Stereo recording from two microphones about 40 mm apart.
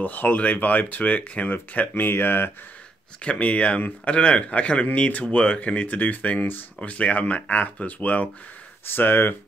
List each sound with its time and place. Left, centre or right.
0.0 s speech: left
2.0 s speech: left
3.3 s speech: left
8.8 s speech: left